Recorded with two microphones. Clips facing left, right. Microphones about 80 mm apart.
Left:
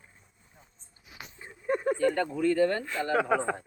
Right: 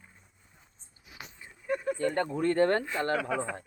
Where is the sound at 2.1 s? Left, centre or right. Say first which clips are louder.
Left 1 dB; right.